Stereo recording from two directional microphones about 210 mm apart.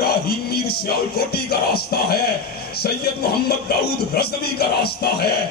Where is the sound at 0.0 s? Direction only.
50° left (ahead or behind).